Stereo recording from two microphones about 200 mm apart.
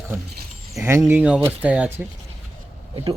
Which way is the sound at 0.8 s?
15° right (ahead or behind).